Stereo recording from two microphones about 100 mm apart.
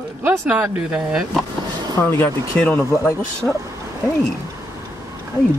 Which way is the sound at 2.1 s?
20° left (ahead or behind).